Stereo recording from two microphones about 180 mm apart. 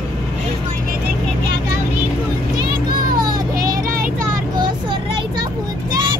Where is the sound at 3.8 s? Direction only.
50° right (ahead or behind).